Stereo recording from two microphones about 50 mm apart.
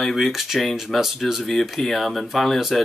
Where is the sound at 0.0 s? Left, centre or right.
Centre.